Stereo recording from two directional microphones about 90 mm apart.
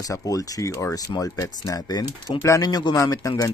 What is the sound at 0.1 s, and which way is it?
Speech, 35° left (ahead or behind).